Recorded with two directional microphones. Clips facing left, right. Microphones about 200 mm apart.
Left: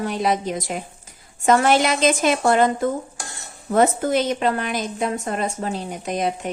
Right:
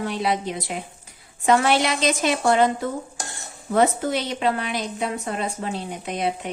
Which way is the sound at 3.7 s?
50° left (ahead or behind).